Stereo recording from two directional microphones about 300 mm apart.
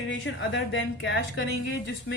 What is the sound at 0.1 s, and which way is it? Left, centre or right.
A woman's voice, left.